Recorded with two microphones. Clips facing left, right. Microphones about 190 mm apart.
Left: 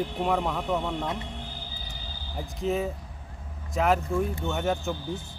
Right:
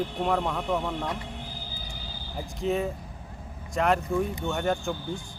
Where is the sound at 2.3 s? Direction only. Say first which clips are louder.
Even; centre (ahead or behind).